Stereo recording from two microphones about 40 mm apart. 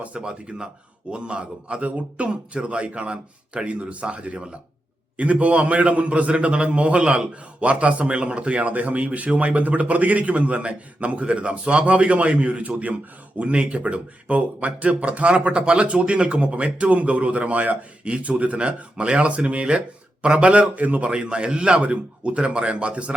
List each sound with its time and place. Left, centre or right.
0.0 s speech: right
21.1 s speech: right